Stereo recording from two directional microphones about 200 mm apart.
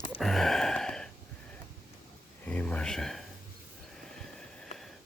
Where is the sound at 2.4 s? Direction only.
5° left (ahead or behind).